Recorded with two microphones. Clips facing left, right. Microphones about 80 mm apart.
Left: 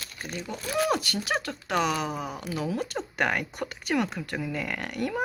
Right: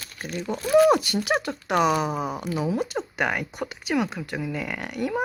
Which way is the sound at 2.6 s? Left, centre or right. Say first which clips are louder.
Right 4 dB; centre.